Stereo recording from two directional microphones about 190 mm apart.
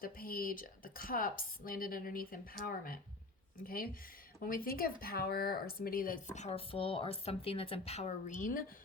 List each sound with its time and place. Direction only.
0.0 s speech: 50° left (ahead or behind)